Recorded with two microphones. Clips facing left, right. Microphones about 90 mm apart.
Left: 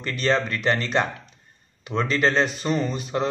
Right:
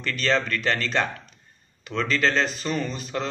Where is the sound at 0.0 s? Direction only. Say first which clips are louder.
Left 1 dB; 20° left (ahead or behind).